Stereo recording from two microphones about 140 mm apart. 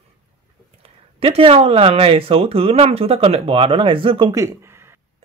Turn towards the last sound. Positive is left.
turn(degrees=-20)  # may be behind; listen again after turning